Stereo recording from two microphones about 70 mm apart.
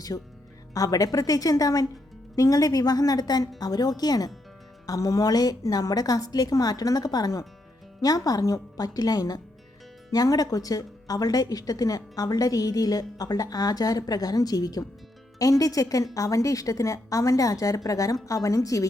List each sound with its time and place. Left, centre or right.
0.1 s speech: left
4.9 s a woman's voice: left